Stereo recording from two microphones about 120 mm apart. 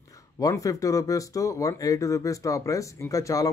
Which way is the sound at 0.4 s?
30° left (ahead or behind).